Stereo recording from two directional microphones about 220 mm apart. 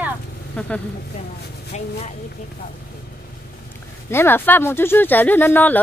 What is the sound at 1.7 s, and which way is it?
Speech, 30° left (ahead or behind).